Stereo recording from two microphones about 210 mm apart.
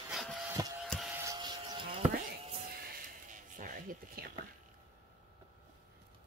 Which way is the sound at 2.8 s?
40° right (ahead or behind).